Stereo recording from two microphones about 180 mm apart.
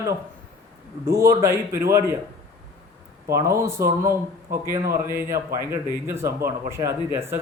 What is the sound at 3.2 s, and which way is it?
Speech, 15° right (ahead or behind).